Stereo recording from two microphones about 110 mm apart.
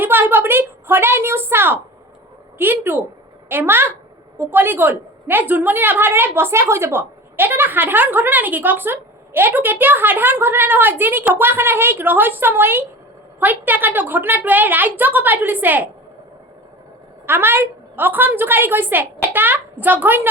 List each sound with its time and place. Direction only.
0.0 s a woman's voice: 20° right (ahead or behind)
17.2 s a woman's voice: 20° right (ahead or behind)